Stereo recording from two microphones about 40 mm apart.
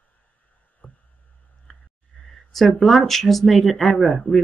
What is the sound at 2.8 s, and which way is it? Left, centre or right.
Speech, centre.